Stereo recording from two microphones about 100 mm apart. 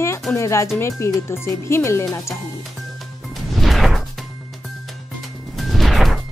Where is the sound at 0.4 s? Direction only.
30° left (ahead or behind).